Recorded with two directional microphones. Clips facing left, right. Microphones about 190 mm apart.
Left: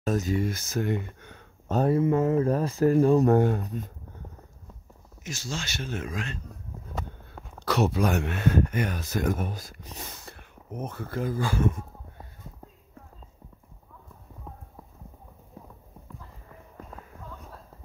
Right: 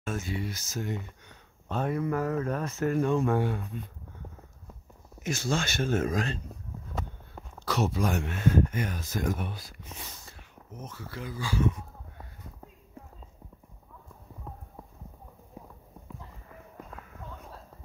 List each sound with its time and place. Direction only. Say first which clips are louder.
0.0 s speech: left 7 dB; 40° left (ahead or behind)
1.8 s speech: left 6 dB; 30° left (ahead or behind)
5.2 s speech: right 6 dB; 55° right (ahead or behind)
7.6 s speech: left 4 dB; 65° left (ahead or behind)
9.4 s speech: left 4 dB; 45° left (ahead or behind)
10.1 s speech: left 4 dB; 60° left (ahead or behind)
15.6 s clip-clop: even; 15° right (ahead or behind)